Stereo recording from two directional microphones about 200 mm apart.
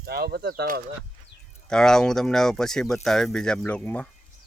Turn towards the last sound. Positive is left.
turn(degrees=10)  # may be behind; listen again after turning